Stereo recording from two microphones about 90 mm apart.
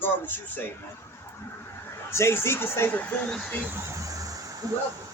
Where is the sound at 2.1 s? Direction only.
30° left (ahead or behind).